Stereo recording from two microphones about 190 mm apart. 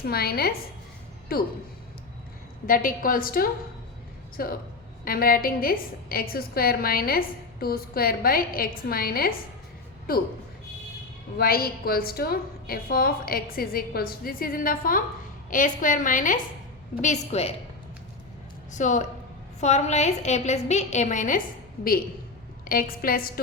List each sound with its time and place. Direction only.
0.0 s a woman's voice: 55° left (ahead or behind)
2.6 s a woman's voice: 45° left (ahead or behind)
11.3 s a woman's voice: 55° left (ahead or behind); by 17.5 s 35° left (ahead or behind)
18.7 s a woman's voice: 40° left (ahead or behind)
22.7 s a woman's voice: 50° left (ahead or behind)